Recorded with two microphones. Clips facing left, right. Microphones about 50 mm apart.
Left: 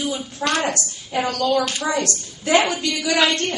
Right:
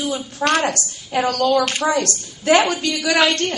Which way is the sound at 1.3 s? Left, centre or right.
Right.